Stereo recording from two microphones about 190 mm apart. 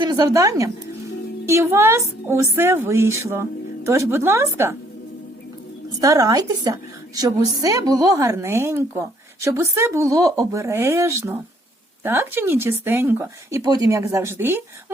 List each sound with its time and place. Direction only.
0.0 s a woman's voice: 20° right (ahead or behind)
6.0 s a woman's voice: 20° right (ahead or behind)